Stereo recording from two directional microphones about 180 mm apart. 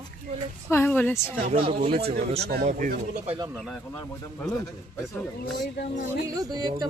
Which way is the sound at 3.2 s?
25° right (ahead or behind).